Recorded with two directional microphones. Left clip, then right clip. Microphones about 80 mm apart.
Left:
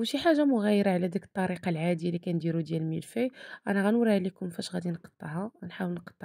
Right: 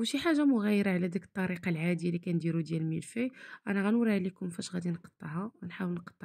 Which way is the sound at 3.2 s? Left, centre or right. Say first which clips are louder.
Left 7 dB; left.